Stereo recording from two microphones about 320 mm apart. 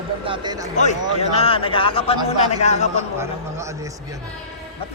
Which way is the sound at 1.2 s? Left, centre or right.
Centre.